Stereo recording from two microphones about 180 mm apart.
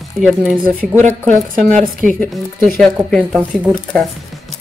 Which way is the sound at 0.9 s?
40° right (ahead or behind).